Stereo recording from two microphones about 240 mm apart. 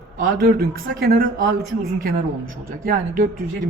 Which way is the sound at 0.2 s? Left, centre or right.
Right.